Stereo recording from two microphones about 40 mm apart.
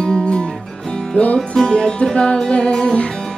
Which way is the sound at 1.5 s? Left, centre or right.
Left.